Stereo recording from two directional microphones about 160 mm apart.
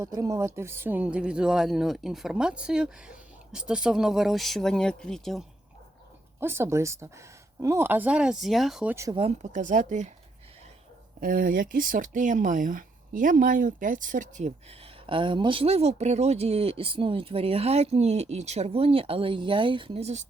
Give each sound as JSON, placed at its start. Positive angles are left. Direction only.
{"t": 0.0, "sound": "speech", "side_deg": -20}
{"t": 6.4, "sound": "speech", "side_deg": -15}
{"t": 9.1, "sound": "speech", "side_deg": -45}
{"t": 11.2, "sound": "speech", "side_deg": -60}
{"t": 15.0, "sound": "speech", "side_deg": -30}